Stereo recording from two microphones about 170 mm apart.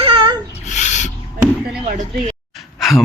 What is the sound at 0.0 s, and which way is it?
Rub, 30° right (ahead or behind).